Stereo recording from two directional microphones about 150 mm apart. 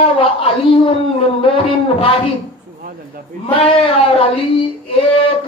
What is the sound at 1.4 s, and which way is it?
Speech, 35° left (ahead or behind).